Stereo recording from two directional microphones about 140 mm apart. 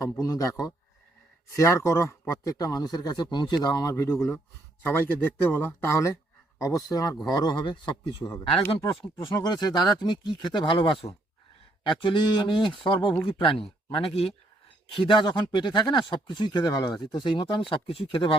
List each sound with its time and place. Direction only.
0.0 s a man's voice: 25° left (ahead or behind)
8.2 s a man's voice: 20° left (ahead or behind)
9.3 s speech: 30° left (ahead or behind)